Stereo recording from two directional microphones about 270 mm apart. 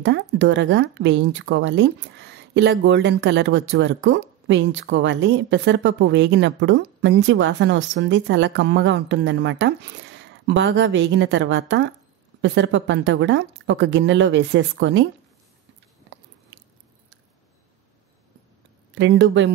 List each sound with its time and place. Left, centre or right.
0.0 s speech: right
18.9 s speech: right